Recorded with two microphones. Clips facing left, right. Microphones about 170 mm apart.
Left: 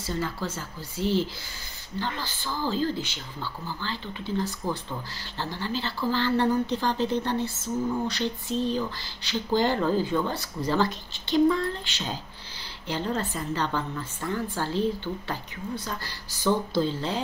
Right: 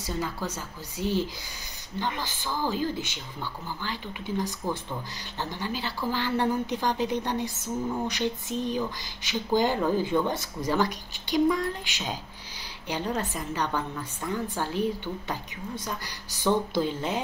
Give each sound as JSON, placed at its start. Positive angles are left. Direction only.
{"t": 0.0, "sound": "speech", "side_deg": -15}